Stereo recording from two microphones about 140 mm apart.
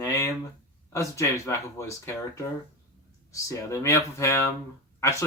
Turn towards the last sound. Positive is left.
turn(degrees=20)  # may be behind; listen again after turning